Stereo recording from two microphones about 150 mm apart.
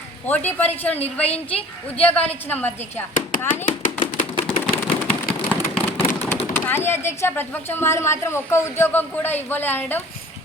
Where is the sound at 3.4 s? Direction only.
65° left (ahead or behind).